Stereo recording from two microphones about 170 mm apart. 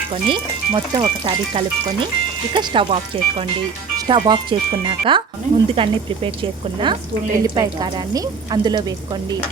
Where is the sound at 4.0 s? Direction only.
25° right (ahead or behind).